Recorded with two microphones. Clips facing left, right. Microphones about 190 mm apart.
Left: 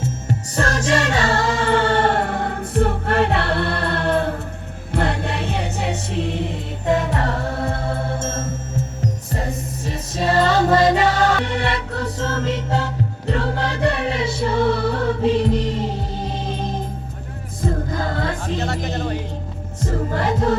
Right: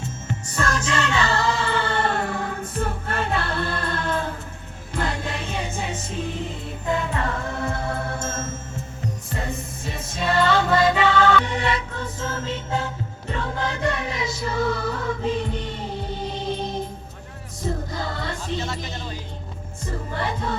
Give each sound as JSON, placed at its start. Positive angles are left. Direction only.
{"t": 0.3, "sound": "music", "side_deg": 35}
{"t": 7.2, "sound": "music", "side_deg": 35}
{"t": 11.4, "sound": "music", "side_deg": 65}
{"t": 14.2, "sound": "music", "side_deg": 30}
{"t": 15.2, "sound": "music", "side_deg": 80}
{"t": 17.6, "sound": "music", "side_deg": 50}
{"t": 18.4, "sound": "a sound", "side_deg": 65}
{"t": 18.9, "sound": "music", "side_deg": 65}
{"t": 19.8, "sound": "music", "side_deg": 90}